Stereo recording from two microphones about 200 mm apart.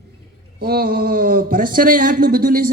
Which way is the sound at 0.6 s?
50° right (ahead or behind).